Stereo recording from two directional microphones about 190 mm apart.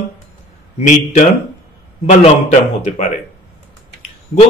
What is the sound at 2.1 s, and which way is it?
A man's voice, 35° left (ahead or behind).